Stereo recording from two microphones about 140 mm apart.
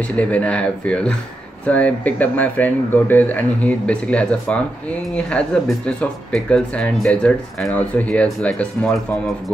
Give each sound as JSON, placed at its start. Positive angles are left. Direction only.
{"t": 0.1, "sound": "speech", "side_deg": 10}